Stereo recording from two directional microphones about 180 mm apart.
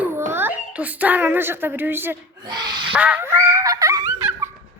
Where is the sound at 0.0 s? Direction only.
15° right (ahead or behind).